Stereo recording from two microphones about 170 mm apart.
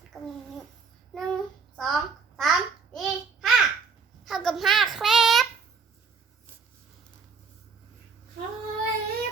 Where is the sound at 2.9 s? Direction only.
Centre (ahead or behind).